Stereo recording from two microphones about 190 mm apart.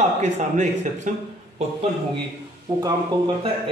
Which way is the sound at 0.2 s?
35° right (ahead or behind).